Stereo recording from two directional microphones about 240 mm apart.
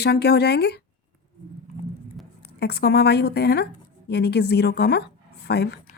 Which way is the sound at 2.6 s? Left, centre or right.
Left.